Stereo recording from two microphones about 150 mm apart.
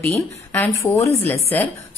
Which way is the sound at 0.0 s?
10° left (ahead or behind).